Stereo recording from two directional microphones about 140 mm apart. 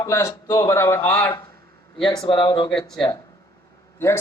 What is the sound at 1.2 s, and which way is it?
A man's voice, 30° left (ahead or behind).